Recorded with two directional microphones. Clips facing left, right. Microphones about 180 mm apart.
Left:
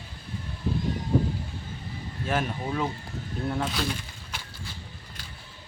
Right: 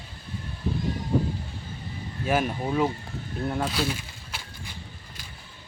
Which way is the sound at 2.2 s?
10° right (ahead or behind).